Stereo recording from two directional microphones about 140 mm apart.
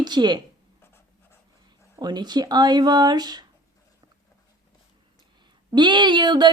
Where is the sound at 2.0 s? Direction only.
30° right (ahead or behind).